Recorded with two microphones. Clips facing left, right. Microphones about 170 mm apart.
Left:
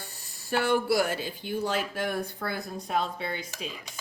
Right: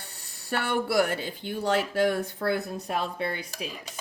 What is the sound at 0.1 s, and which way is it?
Speech, 65° right (ahead or behind).